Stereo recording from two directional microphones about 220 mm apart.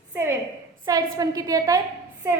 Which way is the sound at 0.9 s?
15° right (ahead or behind).